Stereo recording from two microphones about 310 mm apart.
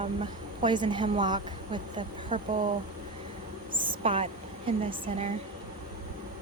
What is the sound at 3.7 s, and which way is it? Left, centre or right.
Speech, centre.